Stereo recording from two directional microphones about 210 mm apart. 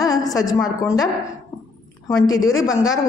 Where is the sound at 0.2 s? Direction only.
15° left (ahead or behind).